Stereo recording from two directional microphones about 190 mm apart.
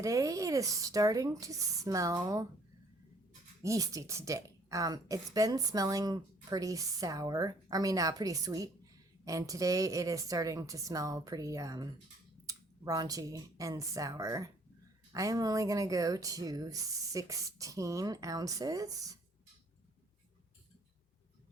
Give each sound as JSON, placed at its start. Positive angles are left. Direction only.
{"t": 0.0, "sound": "a woman's voice", "side_deg": -15}
{"t": 3.6, "sound": "a woman's voice", "side_deg": -15}